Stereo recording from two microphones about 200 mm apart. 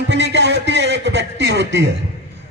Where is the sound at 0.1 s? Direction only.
60° right (ahead or behind).